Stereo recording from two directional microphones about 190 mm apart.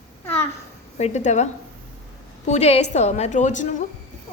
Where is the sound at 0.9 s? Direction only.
35° left (ahead or behind).